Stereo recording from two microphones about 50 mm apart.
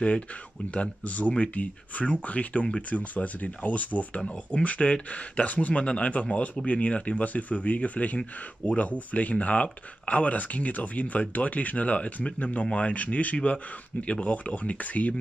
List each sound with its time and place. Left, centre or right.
0.7 s speech: left